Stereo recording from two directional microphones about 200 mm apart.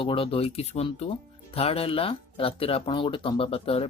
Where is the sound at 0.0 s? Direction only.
25° left (ahead or behind).